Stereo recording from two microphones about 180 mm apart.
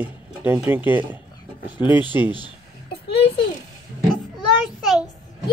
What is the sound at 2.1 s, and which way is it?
Speech, 15° right (ahead or behind).